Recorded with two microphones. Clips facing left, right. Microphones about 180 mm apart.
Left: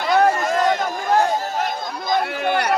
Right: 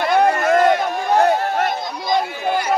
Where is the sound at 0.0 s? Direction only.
60° right (ahead or behind).